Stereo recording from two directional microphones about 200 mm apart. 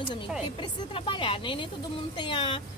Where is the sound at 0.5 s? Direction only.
25° left (ahead or behind).